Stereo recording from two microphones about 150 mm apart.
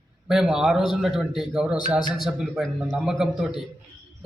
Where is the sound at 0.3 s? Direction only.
5° right (ahead or behind).